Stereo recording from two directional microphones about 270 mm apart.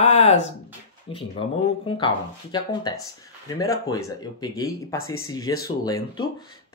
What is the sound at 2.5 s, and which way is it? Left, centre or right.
Speech, centre.